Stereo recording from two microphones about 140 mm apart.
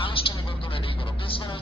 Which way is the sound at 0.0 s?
40° left (ahead or behind).